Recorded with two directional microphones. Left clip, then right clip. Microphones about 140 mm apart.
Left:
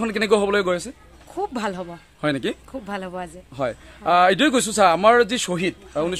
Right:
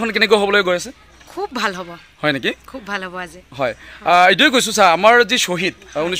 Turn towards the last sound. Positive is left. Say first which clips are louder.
# right 3 dB
turn(degrees=-20)  # may be behind; listen again after turning